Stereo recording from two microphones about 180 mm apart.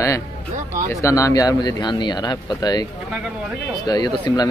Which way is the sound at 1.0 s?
15° left (ahead or behind).